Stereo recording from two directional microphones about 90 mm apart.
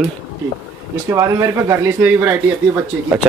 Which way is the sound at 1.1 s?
35° right (ahead or behind).